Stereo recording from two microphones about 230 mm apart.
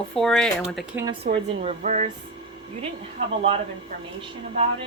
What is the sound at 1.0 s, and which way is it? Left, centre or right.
A woman's voice, right.